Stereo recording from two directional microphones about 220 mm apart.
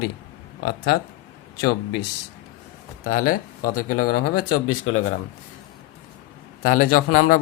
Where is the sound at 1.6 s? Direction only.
50° left (ahead or behind).